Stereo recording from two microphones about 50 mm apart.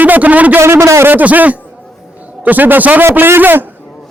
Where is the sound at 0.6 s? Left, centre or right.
Right.